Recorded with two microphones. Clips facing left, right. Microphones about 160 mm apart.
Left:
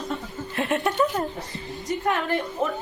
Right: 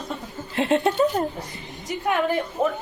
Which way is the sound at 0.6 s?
30° right (ahead or behind).